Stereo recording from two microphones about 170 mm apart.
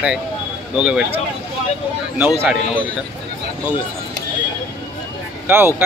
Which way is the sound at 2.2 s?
5° right (ahead or behind).